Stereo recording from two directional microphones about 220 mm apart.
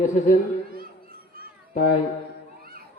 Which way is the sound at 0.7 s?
40° right (ahead or behind).